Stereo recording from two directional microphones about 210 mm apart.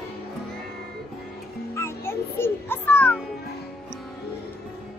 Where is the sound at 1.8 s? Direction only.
10° left (ahead or behind).